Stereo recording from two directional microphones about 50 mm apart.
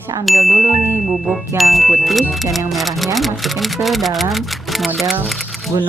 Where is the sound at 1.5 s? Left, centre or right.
Centre.